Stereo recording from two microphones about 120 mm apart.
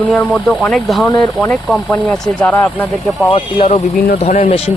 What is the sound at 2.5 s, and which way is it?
Speech, 15° left (ahead or behind).